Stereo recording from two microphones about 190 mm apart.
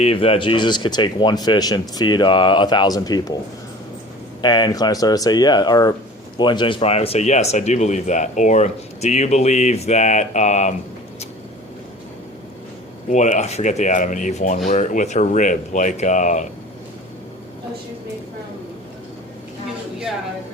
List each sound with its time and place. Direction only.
0.0 s speech: 30° left (ahead or behind)
4.4 s speech: 25° left (ahead or behind)
13.1 s speech: 40° left (ahead or behind)